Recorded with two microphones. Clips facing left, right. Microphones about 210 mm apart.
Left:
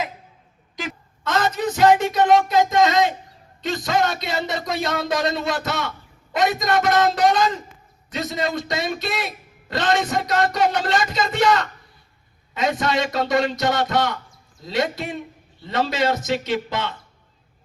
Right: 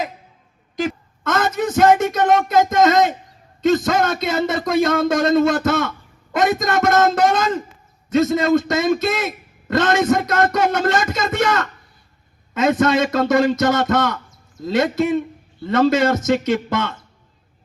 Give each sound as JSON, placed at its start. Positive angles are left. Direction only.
{"t": 0.8, "sound": "a woman's voice", "side_deg": -50}